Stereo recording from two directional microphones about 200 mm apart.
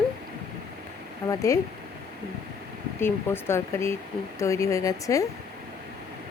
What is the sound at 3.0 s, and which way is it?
Speech, 10° left (ahead or behind).